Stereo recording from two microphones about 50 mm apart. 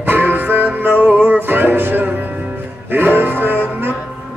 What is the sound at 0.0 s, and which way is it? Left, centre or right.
Music, right.